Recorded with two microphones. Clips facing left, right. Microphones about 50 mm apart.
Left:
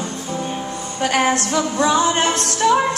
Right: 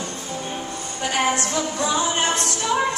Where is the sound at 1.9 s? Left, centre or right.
Left.